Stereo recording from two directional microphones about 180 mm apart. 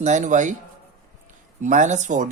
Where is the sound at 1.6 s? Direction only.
45° right (ahead or behind).